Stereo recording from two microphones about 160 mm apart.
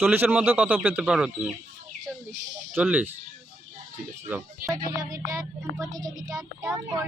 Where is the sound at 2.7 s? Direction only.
10° right (ahead or behind).